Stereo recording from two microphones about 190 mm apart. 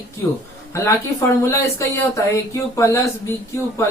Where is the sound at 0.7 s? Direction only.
15° left (ahead or behind).